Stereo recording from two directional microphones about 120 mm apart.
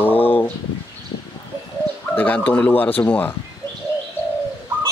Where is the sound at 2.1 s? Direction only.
15° left (ahead or behind).